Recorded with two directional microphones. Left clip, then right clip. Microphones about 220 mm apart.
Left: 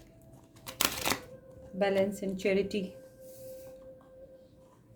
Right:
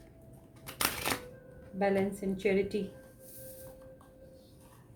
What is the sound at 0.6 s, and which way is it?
Typewriter, 45° left (ahead or behind).